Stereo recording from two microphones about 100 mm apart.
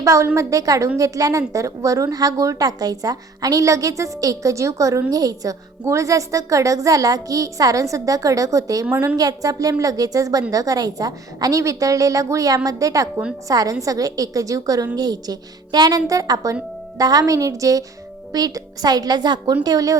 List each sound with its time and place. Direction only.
0.0 s a woman's voice: 30° right (ahead or behind)